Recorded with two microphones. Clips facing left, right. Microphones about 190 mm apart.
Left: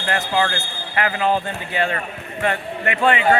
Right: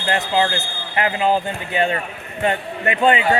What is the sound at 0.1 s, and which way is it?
A man's voice, 25° right (ahead or behind).